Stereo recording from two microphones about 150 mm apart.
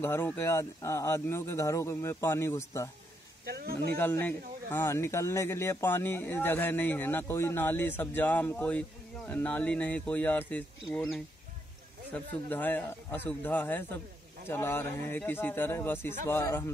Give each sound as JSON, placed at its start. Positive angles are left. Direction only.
{"t": 0.0, "sound": "speech", "side_deg": 15}
{"t": 3.4, "sound": "speech", "side_deg": -90}
{"t": 4.0, "sound": "speech", "side_deg": 15}